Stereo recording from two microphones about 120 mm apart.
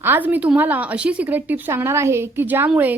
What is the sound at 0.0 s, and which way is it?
Speech, 15° right (ahead or behind).